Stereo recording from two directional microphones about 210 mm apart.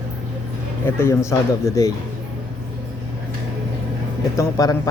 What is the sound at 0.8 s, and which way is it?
Speech, 10° left (ahead or behind).